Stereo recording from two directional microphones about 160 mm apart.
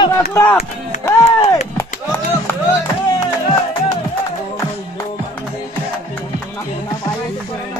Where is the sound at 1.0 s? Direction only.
15° left (ahead or behind).